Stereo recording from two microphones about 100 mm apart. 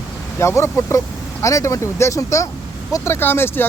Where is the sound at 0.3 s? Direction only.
25° left (ahead or behind).